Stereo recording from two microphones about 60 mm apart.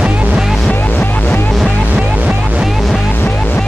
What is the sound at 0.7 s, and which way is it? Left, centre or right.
Music, left.